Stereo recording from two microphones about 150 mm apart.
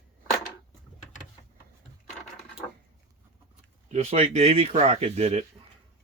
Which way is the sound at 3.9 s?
45° right (ahead or behind).